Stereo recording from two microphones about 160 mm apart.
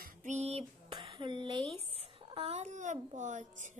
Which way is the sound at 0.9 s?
35° right (ahead or behind).